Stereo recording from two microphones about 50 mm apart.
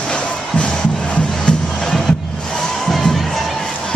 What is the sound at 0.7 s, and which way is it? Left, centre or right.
Music, centre.